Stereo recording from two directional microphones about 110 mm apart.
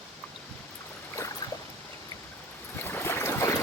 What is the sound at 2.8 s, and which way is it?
Boat, 20° left (ahead or behind).